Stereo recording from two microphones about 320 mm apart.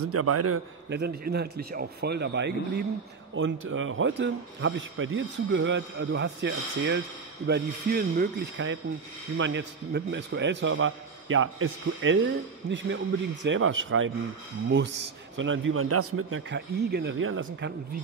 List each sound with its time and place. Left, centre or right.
0.0 s a man's voice: right
0.8 s a man's voice: right